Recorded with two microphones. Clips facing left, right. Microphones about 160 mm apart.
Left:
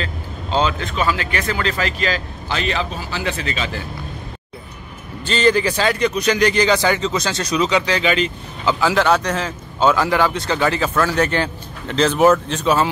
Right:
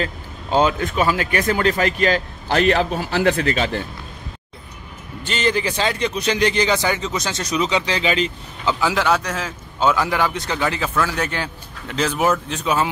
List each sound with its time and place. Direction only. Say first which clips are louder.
0.5 s speech: right 2 dB; 10° right (ahead or behind)
1.0 s a man's voice: right 1 dB; 45° right (ahead or behind)
5.2 s a man's voice: left 5 dB; 20° right (ahead or behind)
8.8 s speech: left 3 dB; 10° right (ahead or behind)